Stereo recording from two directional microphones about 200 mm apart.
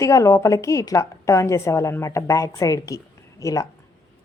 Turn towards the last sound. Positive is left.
turn(degrees=15)  # may be behind; listen again after turning